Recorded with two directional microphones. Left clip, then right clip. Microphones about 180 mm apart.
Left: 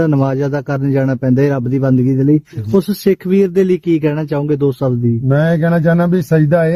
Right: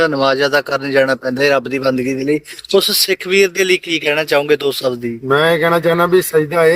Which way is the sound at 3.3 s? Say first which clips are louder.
Right 2 dB; 55° left (ahead or behind).